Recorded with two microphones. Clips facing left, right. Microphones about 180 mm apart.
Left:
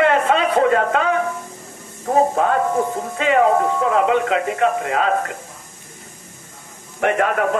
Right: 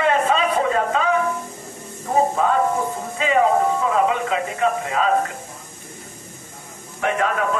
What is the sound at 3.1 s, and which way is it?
A man's voice, 60° left (ahead or behind).